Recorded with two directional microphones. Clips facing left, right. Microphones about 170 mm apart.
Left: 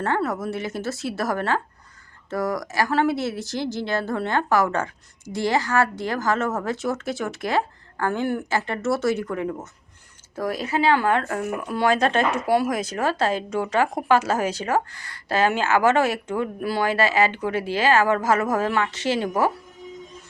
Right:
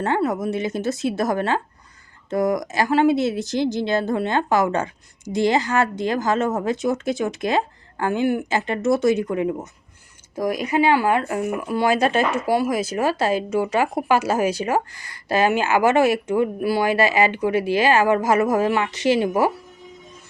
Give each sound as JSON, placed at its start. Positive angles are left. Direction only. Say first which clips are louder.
{"t": 0.0, "sound": "speech", "louder": "right 3 dB", "side_deg": -15}